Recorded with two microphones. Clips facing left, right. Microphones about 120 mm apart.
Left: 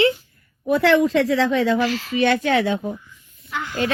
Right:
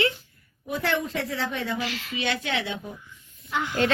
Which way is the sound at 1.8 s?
50° left (ahead or behind).